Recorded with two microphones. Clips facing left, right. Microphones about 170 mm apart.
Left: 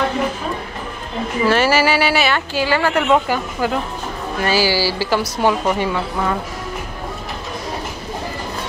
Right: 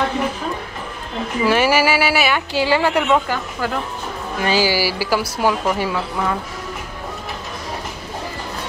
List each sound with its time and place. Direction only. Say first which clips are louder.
1.4 s speech: left 1 dB; 10° right (ahead or behind)
2.5 s speech: right 2 dB; 20° right (ahead or behind)
3.1 s speech: left 2 dB; 10° left (ahead or behind)
4.4 s a woman's voice: even; 15° right (ahead or behind)